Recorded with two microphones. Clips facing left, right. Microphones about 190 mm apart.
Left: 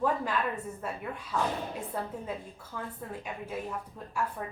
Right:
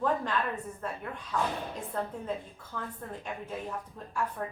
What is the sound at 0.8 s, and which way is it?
A woman's voice, 10° left (ahead or behind).